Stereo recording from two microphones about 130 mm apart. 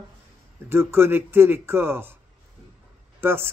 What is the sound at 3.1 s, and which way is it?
Speech, 20° right (ahead or behind).